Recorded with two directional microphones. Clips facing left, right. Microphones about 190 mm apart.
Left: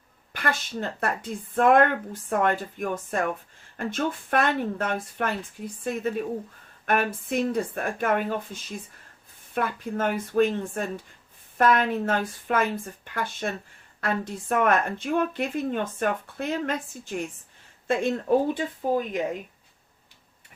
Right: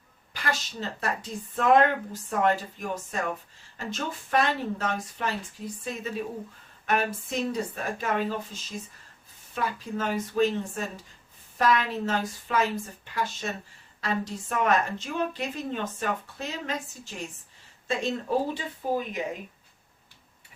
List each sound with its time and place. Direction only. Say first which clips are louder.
0.3 s a woman's voice: left 3 dB; 55° left (ahead or behind)
9.6 s a woman's voice: left 3 dB; 55° left (ahead or behind)